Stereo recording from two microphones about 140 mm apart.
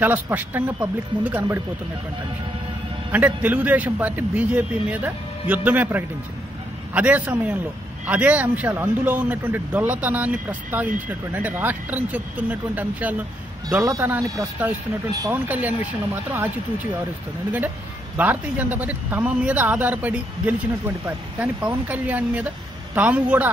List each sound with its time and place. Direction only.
0.0 s speech: 10° right (ahead or behind)
3.1 s speech: 10° right (ahead or behind)
18.1 s speech: 10° right (ahead or behind)